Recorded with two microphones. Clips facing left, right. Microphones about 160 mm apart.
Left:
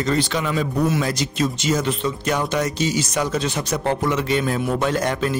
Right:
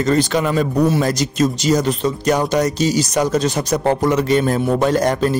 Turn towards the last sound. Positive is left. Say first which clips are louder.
# right 5 dB
turn(degrees=-40)  # may be behind; listen again after turning